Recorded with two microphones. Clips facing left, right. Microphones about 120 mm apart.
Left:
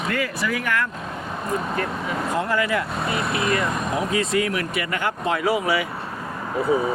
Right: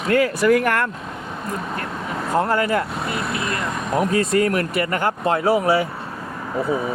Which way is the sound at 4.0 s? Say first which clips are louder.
Right 6 dB; 45° right (ahead or behind).